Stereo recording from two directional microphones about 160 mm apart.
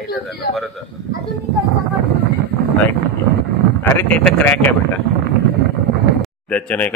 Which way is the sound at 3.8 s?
10° left (ahead or behind).